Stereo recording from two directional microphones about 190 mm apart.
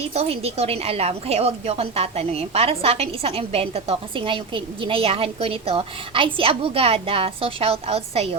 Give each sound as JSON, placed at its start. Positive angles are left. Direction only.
{"t": 0.1, "sound": "a woman's voice", "side_deg": -30}